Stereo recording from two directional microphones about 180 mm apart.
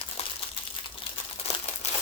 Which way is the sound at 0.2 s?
35° left (ahead or behind).